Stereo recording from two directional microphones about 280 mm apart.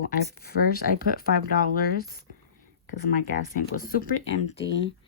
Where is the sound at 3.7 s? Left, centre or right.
Left.